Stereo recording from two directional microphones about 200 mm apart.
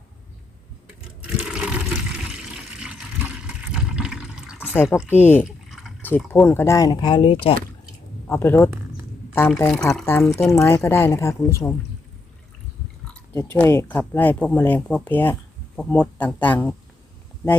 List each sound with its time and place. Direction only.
1.4 s water: 5° right (ahead or behind)
3.4 s water: 5° right (ahead or behind)
5.1 s speech: 10° left (ahead or behind); by 7.6 s 25° left (ahead or behind)
8.3 s speech: 10° left (ahead or behind)
13.1 s speech: 10° left (ahead or behind)